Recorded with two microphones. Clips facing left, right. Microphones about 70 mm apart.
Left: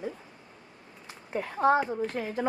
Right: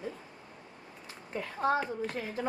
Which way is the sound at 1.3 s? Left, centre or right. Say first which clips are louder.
Left 6 dB; left.